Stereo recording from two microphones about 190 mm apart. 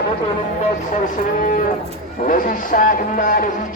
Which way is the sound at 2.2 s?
45° left (ahead or behind).